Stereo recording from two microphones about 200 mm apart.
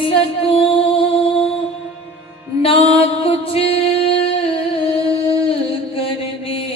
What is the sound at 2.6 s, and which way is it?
Music, 30° left (ahead or behind).